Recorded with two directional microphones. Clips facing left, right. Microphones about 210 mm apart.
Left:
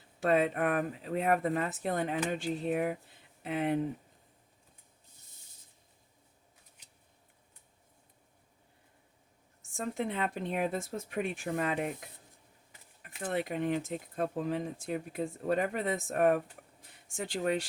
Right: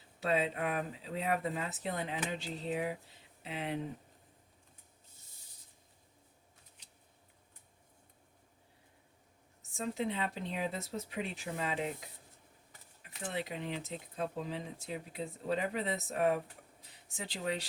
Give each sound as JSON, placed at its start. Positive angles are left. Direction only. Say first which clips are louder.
{"t": 0.2, "sound": "speech", "louder": "left 5 dB", "side_deg": 55}
{"t": 9.7, "sound": "speech", "louder": "left 2 dB", "side_deg": 50}